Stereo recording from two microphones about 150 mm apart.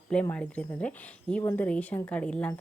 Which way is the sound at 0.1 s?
5° left (ahead or behind).